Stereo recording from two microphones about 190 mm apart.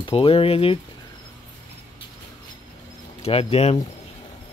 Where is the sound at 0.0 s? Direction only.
30° left (ahead or behind).